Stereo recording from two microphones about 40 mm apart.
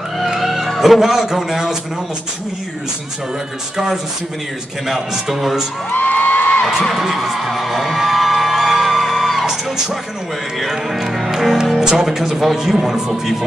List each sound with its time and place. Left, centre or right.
0.4 s speech: centre
3.7 s a man's voice: centre
5.9 s music: left
7.0 s music: centre
10.6 s speech: centre